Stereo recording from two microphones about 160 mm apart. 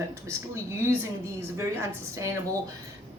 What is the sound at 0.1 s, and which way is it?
A woman's voice, 15° right (ahead or behind).